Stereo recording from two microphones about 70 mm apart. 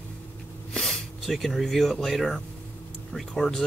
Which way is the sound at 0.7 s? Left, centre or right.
Centre.